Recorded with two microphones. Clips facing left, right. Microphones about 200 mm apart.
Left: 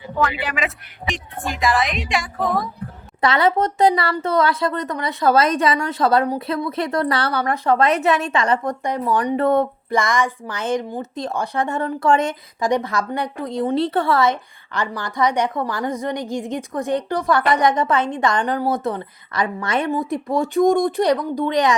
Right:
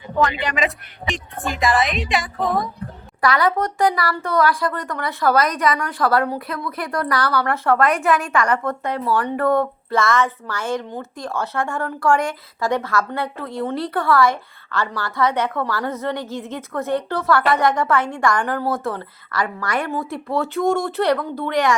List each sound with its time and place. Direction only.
0.2 s a woman's voice: 5° left (ahead or behind)
3.2 s a woman's voice: 25° left (ahead or behind)